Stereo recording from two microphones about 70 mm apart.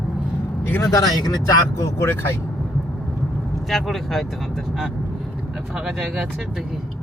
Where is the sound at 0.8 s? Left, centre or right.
Left.